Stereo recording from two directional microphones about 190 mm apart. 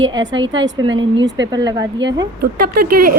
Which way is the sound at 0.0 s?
75° right (ahead or behind).